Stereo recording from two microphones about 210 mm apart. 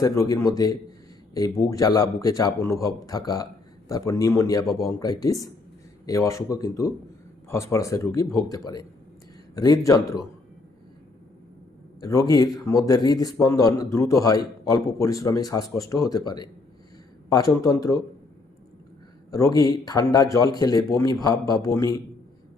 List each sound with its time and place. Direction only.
0.0 s a man's voice: 15° left (ahead or behind)
11.9 s a man's voice: 15° left (ahead or behind)
19.3 s a man's voice: 15° left (ahead or behind)